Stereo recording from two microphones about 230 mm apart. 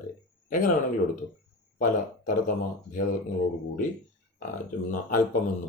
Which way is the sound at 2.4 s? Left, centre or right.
Left.